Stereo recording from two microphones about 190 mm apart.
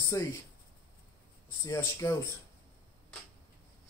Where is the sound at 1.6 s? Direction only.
15° left (ahead or behind).